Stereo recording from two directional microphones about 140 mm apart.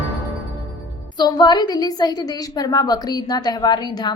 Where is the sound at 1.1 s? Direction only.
30° left (ahead or behind).